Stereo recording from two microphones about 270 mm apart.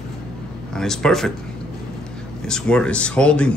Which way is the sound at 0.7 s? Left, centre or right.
Centre.